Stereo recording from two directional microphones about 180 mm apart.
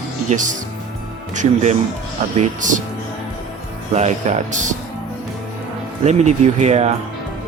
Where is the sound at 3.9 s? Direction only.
40° right (ahead or behind).